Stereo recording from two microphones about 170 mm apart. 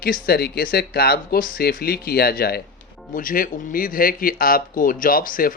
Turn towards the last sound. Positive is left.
turn(degrees=55)  # may be behind; listen again after turning